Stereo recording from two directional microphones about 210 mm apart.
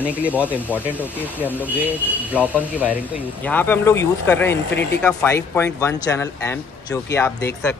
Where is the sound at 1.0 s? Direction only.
10° left (ahead or behind).